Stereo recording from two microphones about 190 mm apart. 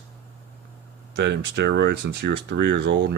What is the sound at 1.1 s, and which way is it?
Speech, 60° right (ahead or behind).